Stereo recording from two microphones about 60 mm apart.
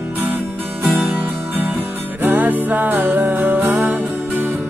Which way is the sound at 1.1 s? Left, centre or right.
Right.